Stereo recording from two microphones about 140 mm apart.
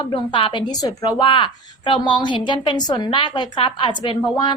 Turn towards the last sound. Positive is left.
turn(degrees=35)  # may be behind; listen again after turning